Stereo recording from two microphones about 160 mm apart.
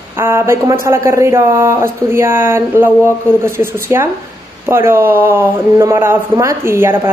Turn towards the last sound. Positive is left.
turn(degrees=-15)  # may be behind; listen again after turning